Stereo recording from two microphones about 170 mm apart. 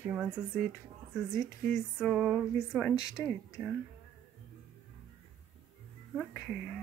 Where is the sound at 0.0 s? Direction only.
10° right (ahead or behind).